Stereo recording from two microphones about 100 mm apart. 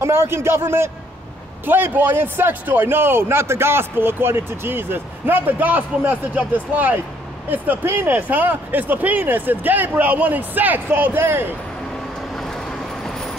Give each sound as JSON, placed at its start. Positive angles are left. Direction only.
{"t": 0.0, "sound": "a man's voice", "side_deg": -25}